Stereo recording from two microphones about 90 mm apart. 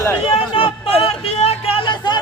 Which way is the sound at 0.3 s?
90° left.